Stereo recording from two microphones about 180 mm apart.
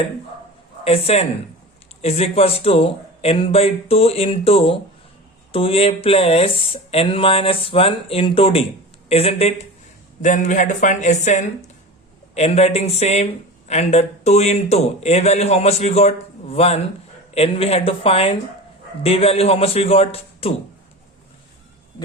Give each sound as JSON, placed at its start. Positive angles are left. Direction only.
{"t": 0.9, "sound": "a man's voice", "side_deg": 35}